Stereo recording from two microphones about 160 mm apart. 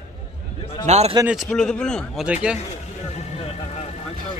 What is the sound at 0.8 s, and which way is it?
Speech, 45° right (ahead or behind).